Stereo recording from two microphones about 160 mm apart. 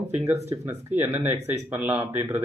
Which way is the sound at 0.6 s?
15° right (ahead or behind).